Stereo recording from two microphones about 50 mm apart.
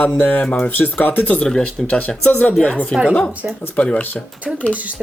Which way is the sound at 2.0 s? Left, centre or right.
Left.